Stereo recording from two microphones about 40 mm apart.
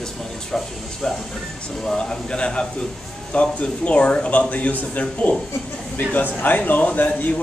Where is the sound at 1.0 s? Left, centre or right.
Centre.